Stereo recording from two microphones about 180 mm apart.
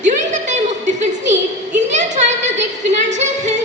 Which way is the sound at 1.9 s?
40° right (ahead or behind).